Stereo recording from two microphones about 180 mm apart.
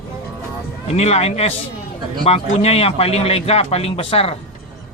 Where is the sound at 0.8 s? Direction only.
35° left (ahead or behind).